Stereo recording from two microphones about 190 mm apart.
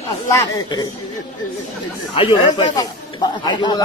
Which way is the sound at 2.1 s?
30° left (ahead or behind).